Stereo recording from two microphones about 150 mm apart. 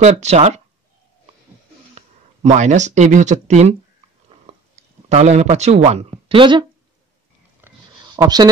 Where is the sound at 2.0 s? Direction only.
50° right (ahead or behind).